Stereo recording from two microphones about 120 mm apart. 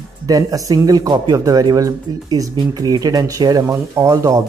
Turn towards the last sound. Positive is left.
turn(degrees=-30)  # may be behind; listen again after turning